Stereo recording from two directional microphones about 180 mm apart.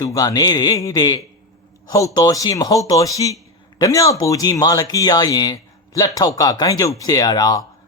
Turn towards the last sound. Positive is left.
turn(degrees=20)  # may be behind; listen again after turning